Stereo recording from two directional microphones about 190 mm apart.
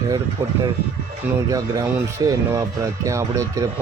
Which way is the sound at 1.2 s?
10° right (ahead or behind).